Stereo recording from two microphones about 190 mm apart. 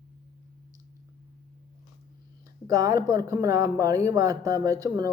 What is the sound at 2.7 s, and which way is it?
Speech, 20° right (ahead or behind).